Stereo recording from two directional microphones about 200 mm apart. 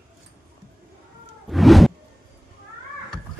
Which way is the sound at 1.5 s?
Centre (ahead or behind).